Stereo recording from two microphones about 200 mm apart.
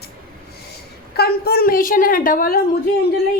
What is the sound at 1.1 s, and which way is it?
Speech, 50° left (ahead or behind).